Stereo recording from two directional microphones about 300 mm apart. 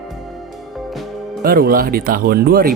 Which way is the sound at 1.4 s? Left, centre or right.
Right.